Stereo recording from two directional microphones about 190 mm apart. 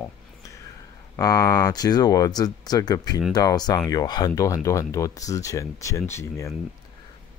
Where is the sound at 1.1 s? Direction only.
20° left (ahead or behind).